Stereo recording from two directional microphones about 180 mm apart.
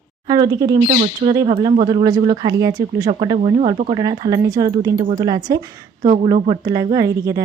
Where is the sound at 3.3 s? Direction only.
35° right (ahead or behind).